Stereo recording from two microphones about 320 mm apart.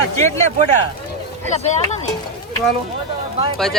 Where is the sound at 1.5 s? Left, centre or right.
Left.